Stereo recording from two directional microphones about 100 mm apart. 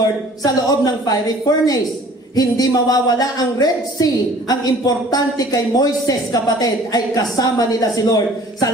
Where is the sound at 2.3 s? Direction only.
40° left (ahead or behind).